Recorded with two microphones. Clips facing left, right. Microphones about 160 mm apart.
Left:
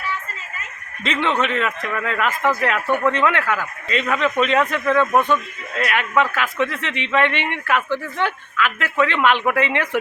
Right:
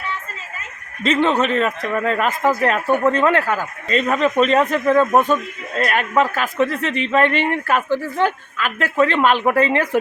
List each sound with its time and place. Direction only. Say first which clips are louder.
1.0 s speech: right 4 dB; 40° right (ahead or behind)